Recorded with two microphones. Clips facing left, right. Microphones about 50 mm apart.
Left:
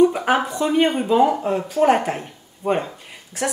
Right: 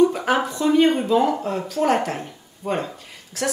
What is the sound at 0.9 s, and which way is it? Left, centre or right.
Speech, centre.